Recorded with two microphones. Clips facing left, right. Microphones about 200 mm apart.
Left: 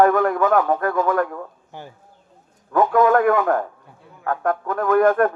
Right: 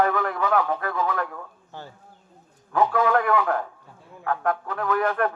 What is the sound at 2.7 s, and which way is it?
Speech, 50° left (ahead or behind).